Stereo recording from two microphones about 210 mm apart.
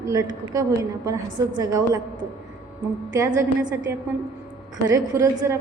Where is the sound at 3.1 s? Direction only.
15° right (ahead or behind).